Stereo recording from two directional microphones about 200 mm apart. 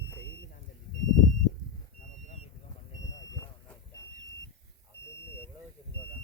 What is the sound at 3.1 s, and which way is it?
Smoke detector, 15° left (ahead or behind).